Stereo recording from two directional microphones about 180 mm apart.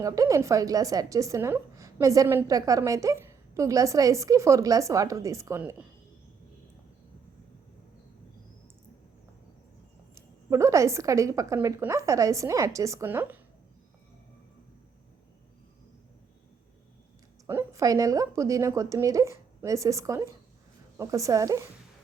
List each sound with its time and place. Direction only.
0.0 s a woman's voice: 20° right (ahead or behind)
10.2 s a woman's voice: 15° right (ahead or behind)
17.4 s a woman's voice: 15° right (ahead or behind)